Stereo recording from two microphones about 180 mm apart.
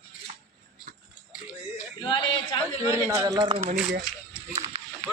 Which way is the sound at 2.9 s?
15° right (ahead or behind).